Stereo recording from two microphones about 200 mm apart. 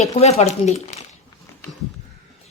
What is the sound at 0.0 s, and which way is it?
Speech, 30° left (ahead or behind).